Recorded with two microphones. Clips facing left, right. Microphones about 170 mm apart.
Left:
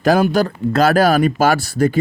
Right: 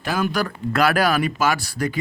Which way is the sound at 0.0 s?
40° left (ahead or behind).